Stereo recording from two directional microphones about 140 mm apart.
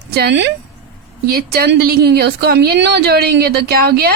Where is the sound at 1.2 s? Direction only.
90° right.